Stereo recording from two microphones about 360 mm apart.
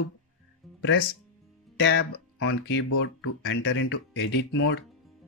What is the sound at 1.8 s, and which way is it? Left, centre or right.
Speech, left.